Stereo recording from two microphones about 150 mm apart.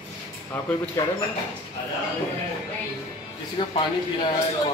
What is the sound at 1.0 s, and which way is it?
Speech, 20° left (ahead or behind).